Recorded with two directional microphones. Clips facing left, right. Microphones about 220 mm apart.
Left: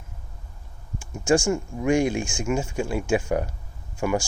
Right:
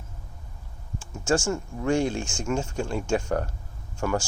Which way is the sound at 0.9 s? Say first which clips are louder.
Left 4 dB; 15° left (ahead or behind).